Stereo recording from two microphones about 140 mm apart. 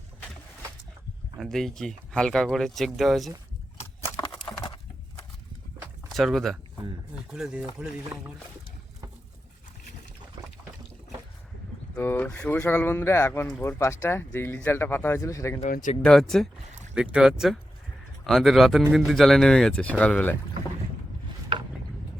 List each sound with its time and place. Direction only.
1.4 s speech: centre (ahead or behind)
6.1 s speech: centre (ahead or behind)
11.9 s speech: 10° left (ahead or behind)
16.0 s speech: 5° left (ahead or behind)